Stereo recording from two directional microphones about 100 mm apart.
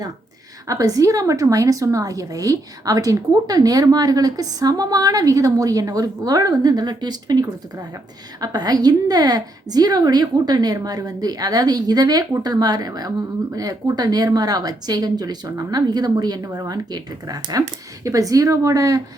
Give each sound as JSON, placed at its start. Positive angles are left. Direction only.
{"t": 0.7, "sound": "a woman's voice", "side_deg": -35}